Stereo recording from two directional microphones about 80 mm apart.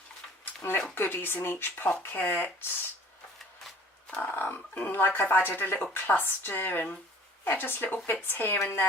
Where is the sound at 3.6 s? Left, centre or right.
Centre.